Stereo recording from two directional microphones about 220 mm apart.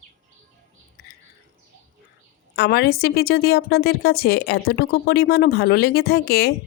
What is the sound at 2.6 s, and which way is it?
A woman's voice, 45° left (ahead or behind).